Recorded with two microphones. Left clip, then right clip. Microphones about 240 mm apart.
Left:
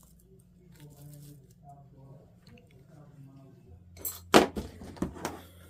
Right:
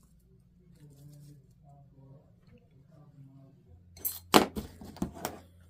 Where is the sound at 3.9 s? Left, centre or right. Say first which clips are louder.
Left 2 dB; right.